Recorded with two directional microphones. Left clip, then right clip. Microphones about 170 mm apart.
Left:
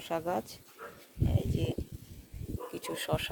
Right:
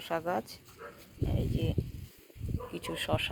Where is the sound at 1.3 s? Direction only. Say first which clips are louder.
Even; 20° left (ahead or behind).